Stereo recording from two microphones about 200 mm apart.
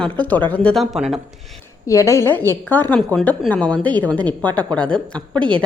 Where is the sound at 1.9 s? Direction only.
15° left (ahead or behind).